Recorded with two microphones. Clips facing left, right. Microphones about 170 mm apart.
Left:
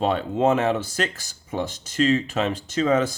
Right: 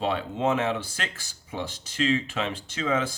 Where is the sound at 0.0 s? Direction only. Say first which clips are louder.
Left 5 dB; 45° left (ahead or behind).